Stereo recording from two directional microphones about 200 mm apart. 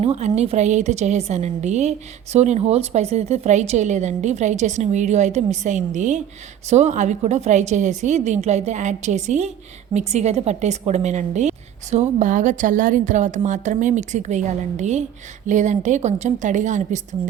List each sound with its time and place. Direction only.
0.0 s a woman's voice: 30° right (ahead or behind)